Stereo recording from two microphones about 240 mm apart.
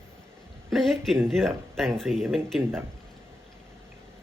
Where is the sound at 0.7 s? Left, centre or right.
Centre.